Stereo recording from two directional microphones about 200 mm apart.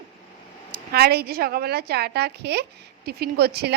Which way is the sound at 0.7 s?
50° right (ahead or behind).